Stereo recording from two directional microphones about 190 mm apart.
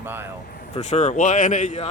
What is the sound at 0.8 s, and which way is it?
Speech, 35° left (ahead or behind).